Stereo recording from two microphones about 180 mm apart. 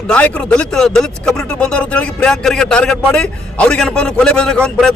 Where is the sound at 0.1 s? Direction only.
5° left (ahead or behind).